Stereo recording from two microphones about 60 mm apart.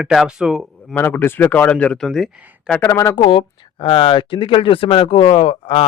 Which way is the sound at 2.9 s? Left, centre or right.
Left.